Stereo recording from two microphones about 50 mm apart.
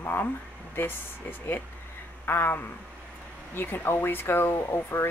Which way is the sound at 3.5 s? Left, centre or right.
Left.